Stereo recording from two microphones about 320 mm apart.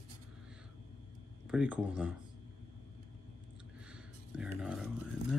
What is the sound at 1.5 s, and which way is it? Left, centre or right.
Speech, centre.